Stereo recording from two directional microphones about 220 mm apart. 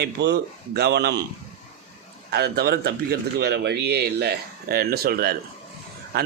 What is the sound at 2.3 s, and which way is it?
Speech, 45° right (ahead or behind).